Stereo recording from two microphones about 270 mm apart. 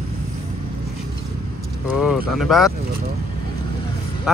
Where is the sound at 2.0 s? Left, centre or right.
Centre.